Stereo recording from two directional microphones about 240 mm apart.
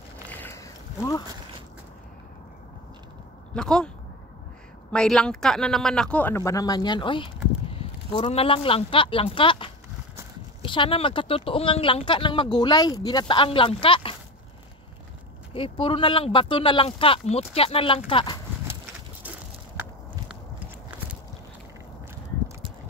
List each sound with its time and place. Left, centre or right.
0.3 s a sound: centre
3.5 s speech: centre
4.9 s speech: centre; by 14.1 s left
15.5 s speech: left